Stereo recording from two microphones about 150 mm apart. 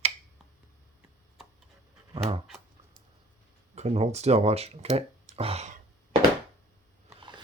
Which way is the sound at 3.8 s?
45° right (ahead or behind).